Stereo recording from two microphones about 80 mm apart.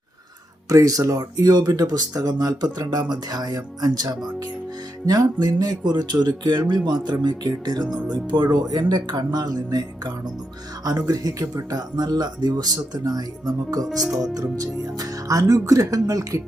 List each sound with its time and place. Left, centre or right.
0.7 s speech: right
14.0 s speech: centre
14.3 s speech: right